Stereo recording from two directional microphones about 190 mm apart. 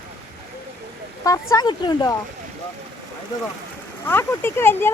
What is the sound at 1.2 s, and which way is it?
Speech, 20° left (ahead or behind).